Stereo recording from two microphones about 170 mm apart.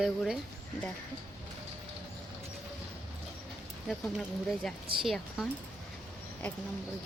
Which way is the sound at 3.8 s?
Centre (ahead or behind).